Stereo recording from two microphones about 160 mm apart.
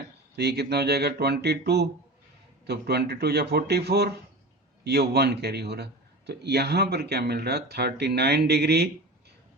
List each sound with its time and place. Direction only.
0.3 s a man's voice: 90° right